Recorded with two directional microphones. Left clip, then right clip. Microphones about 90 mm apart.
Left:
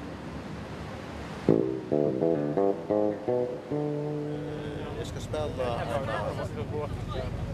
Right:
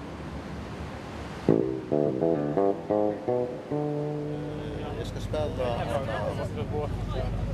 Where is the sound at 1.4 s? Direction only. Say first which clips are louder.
Even; 25° left (ahead or behind).